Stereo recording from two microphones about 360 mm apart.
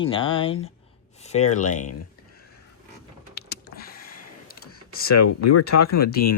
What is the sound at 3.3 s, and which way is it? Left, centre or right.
Computer keyboard, left.